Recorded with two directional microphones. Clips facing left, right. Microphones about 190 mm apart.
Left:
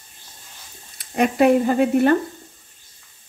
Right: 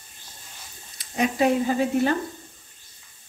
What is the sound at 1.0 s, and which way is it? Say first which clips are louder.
Speech: left 5 dB; 60° left (ahead or behind).